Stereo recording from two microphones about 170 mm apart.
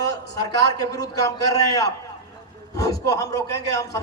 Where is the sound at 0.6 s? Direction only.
20° left (ahead or behind).